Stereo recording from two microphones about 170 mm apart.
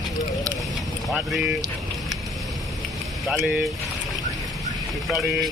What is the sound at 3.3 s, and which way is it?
Speech, 5° right (ahead or behind).